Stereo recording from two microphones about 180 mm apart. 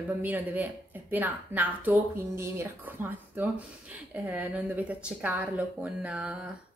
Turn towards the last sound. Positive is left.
turn(degrees=-10)  # may be behind; listen again after turning